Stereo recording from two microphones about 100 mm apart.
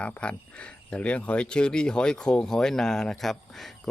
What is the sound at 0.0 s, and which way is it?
Speech, 10° left (ahead or behind).